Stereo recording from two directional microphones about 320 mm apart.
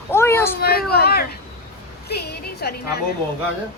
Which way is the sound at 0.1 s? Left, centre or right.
Centre.